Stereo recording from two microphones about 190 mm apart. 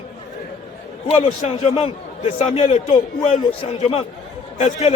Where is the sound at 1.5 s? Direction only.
30° left (ahead or behind).